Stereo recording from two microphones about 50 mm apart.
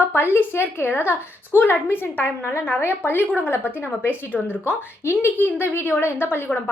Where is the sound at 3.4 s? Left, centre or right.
Left.